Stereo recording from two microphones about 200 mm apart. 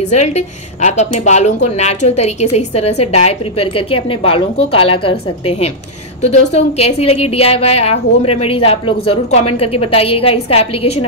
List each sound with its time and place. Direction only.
0.1 s a woman's voice: 35° left (ahead or behind)
6.2 s a woman's voice: 35° left (ahead or behind)